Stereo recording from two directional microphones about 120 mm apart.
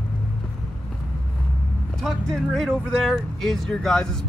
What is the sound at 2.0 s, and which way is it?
Speech, 5° left (ahead or behind).